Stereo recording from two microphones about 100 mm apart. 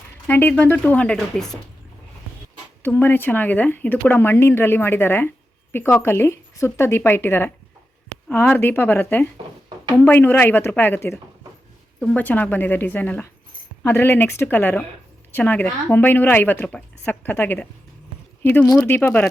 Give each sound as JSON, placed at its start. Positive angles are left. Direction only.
{"t": 0.3, "sound": "speech", "side_deg": 20}
{"t": 2.8, "sound": "speech", "side_deg": 20}